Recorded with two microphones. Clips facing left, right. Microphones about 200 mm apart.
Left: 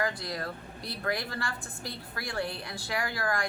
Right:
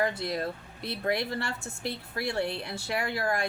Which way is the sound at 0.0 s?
25° right (ahead or behind).